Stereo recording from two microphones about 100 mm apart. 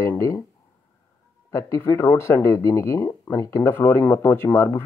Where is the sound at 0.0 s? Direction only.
30° left (ahead or behind).